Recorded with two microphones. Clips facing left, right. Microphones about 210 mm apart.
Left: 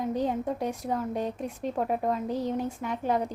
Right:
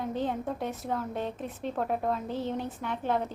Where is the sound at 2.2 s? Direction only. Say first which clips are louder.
Left 3 dB; 40° left (ahead or behind).